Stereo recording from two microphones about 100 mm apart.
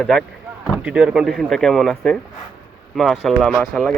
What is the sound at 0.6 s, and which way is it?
Speech, 10° right (ahead or behind).